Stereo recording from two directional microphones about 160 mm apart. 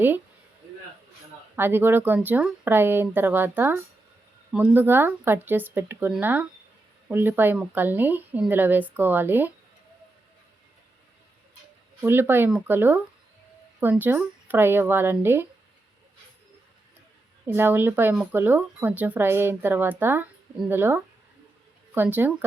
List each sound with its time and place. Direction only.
1.5 s speech: 15° right (ahead or behind)
12.0 s speech: 15° right (ahead or behind)
17.4 s speech: 15° right (ahead or behind)